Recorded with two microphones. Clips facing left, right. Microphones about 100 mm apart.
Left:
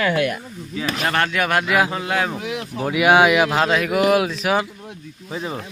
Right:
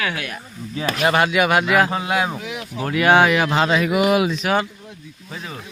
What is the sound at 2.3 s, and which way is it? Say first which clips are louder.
Speech: left 3 dB; 45° left (ahead or behind).